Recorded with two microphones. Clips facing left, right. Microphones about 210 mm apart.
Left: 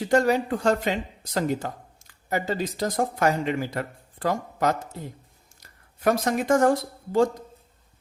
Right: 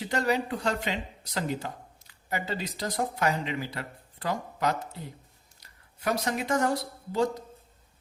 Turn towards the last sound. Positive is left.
turn(degrees=50)  # may be behind; listen again after turning